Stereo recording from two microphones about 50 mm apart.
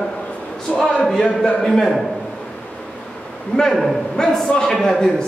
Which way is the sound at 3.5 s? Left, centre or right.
Centre.